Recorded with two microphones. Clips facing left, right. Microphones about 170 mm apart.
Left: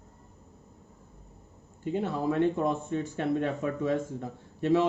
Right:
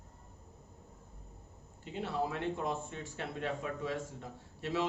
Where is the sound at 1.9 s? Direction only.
50° left (ahead or behind).